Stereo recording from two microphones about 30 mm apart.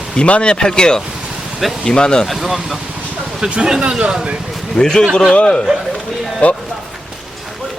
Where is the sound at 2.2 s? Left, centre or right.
Centre.